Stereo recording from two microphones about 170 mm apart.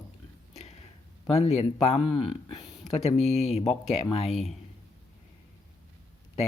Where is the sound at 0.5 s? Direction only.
40° left (ahead or behind).